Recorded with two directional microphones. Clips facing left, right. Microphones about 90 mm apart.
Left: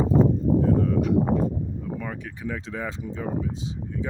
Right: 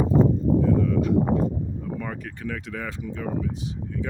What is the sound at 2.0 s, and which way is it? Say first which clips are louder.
Speech: right 1 dB; centre (ahead or behind).